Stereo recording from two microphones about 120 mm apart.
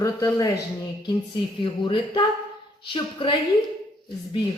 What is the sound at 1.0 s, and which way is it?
Speech, 45° left (ahead or behind).